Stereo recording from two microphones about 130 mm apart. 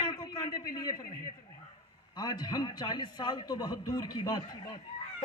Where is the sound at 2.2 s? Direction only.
30° left (ahead or behind).